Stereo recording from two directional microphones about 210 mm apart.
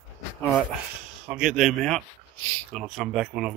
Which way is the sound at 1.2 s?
5° right (ahead or behind).